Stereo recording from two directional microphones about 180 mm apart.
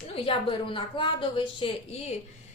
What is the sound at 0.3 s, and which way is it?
A woman's voice, 30° left (ahead or behind).